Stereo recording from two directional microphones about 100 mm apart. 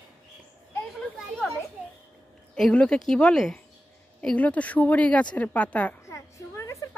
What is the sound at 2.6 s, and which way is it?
A woman's voice, 10° left (ahead or behind).